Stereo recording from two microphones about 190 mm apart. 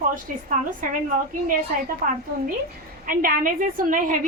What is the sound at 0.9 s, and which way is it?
A woman's voice, 45° right (ahead or behind).